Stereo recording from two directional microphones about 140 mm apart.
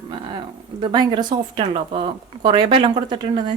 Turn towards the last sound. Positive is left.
turn(degrees=-35)  # may be behind; listen again after turning